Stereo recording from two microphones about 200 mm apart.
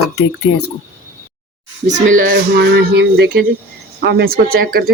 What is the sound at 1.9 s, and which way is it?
A woman's voice, 40° right (ahead or behind).